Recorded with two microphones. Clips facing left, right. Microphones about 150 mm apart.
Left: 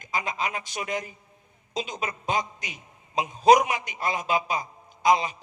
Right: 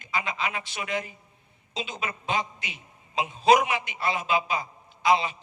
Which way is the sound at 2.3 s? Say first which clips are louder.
Left 1 dB; 45° left (ahead or behind).